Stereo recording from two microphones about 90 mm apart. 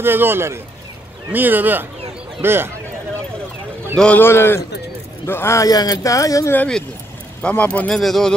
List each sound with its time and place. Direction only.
0.0 s speech: 25° right (ahead or behind)
3.9 s a man's voice: 10° left (ahead or behind)
4.2 s a man's voice: 25° left (ahead or behind)
5.7 s speech: 45° left (ahead or behind)
7.4 s speech: 15° left (ahead or behind)
7.9 s speech: 5° left (ahead or behind)